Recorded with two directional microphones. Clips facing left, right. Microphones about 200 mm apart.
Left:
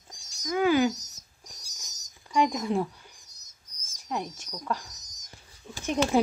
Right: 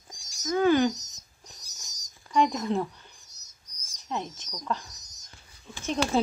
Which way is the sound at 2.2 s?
10° left (ahead or behind).